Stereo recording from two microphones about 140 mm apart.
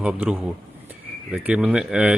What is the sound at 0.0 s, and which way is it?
A man's voice, 10° right (ahead or behind).